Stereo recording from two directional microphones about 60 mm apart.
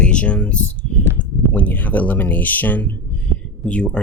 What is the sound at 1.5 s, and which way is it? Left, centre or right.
Speech, left.